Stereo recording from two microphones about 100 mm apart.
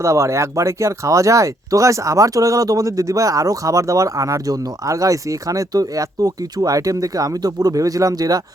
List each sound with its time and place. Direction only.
0.0 s speech: 30° right (ahead or behind)